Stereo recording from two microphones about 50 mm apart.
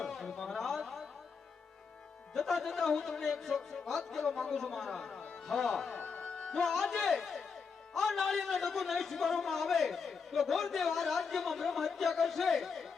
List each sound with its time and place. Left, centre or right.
0.0 s a sound: centre
2.3 s speech: centre
6.0 s music: left
6.2 s speech: centre